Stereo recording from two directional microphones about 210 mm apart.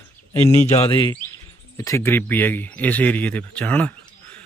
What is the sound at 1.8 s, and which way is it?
A man's voice, 15° left (ahead or behind).